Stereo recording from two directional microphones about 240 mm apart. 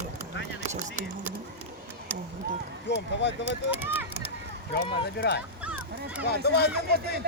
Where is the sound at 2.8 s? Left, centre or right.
Left.